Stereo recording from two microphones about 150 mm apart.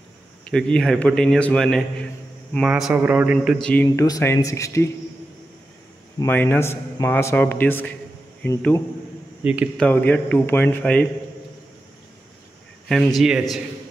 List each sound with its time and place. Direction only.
0.5 s a man's voice: 5° left (ahead or behind); by 3.3 s 10° right (ahead or behind)
3.3 s speech: 5° left (ahead or behind)
6.2 s a man's voice: 15° left (ahead or behind)
9.4 s speech: 10° right (ahead or behind)
9.8 s a man's voice: 10° left (ahead or behind)
13.2 s a man's voice: 5° right (ahead or behind)